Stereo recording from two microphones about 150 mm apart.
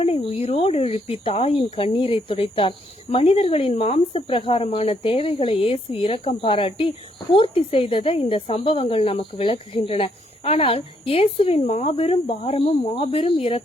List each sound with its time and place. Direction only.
0.0 s speech: 40° left (ahead or behind)